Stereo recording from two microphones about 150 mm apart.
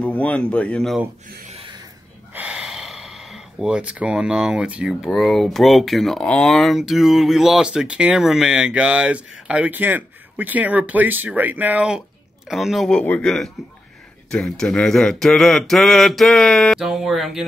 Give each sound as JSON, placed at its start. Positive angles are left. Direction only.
{"t": 0.0, "sound": "speech", "side_deg": 10}
{"t": 1.5, "sound": "a sound", "side_deg": -35}
{"t": 2.3, "sound": "speech", "side_deg": -5}